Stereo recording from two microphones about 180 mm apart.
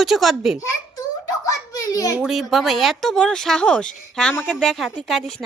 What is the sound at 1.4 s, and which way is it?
Speech, 20° left (ahead or behind).